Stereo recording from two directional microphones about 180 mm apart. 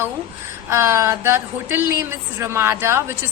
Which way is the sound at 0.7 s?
15° right (ahead or behind).